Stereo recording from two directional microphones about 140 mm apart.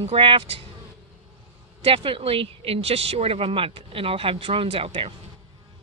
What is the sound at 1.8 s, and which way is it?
Speech, 40° right (ahead or behind).